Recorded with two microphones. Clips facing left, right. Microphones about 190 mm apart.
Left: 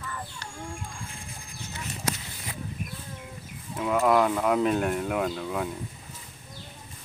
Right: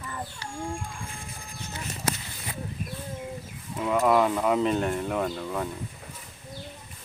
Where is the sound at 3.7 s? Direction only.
Centre (ahead or behind).